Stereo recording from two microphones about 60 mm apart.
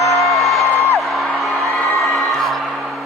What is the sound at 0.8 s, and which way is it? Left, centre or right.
Music, left.